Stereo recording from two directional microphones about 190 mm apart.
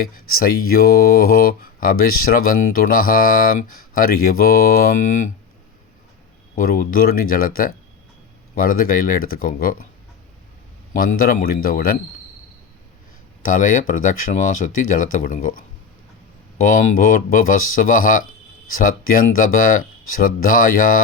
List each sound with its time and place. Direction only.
0.3 s speech: 50° left (ahead or behind)
6.6 s speech: 50° left (ahead or behind)
10.9 s speech: 50° left (ahead or behind)
13.4 s speech: 45° left (ahead or behind)
16.6 s speech: 45° left (ahead or behind)